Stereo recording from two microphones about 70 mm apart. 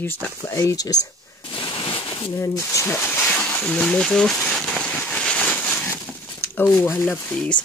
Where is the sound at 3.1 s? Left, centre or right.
Centre.